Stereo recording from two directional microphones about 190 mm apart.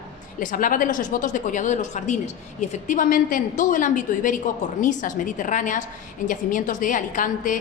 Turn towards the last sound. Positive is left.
turn(degrees=45)  # may be behind; listen again after turning